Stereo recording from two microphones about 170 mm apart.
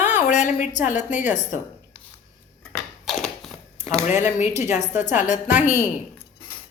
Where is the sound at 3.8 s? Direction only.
40° left (ahead or behind).